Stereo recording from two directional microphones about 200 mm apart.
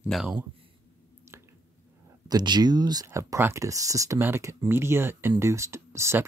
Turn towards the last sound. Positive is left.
turn(degrees=-15)  # may be behind; listen again after turning